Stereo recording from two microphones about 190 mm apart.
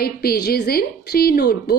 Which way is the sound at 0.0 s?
55° left (ahead or behind).